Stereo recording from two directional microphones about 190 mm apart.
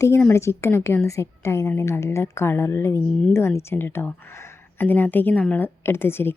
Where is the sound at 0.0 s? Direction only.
10° left (ahead or behind).